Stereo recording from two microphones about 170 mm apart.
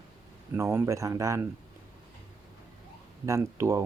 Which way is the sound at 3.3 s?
15° right (ahead or behind).